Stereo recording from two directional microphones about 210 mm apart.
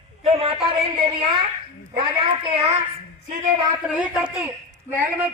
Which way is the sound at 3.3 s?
40° right (ahead or behind).